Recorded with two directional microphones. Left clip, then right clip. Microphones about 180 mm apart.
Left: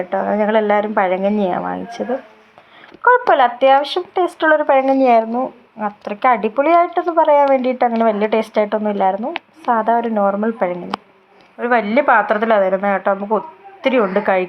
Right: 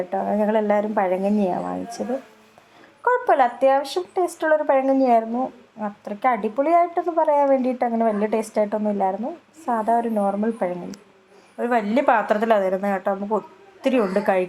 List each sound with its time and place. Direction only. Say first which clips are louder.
0.1 s speech: left 6 dB; 10° left (ahead or behind)
3.0 s speech: left 6 dB; 10° left (ahead or behind)